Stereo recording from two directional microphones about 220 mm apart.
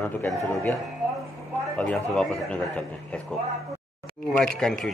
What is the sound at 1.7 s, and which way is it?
A man's voice, 5° left (ahead or behind).